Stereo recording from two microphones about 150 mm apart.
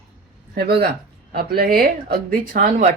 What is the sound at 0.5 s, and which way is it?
Speech, 90° right.